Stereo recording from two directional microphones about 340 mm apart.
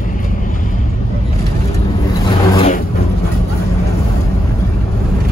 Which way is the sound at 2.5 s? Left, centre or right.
Centre.